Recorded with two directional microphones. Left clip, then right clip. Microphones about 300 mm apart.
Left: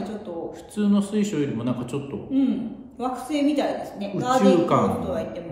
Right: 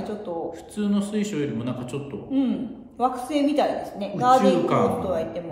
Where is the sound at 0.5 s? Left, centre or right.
Centre.